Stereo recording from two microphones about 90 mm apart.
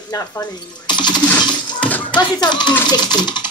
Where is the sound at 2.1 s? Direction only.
55° left (ahead or behind).